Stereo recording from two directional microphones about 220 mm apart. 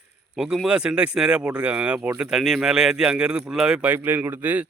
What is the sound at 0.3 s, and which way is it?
Speech, 5° right (ahead or behind).